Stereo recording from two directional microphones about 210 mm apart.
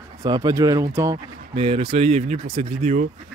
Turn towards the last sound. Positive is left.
turn(degrees=-35)  # may be behind; listen again after turning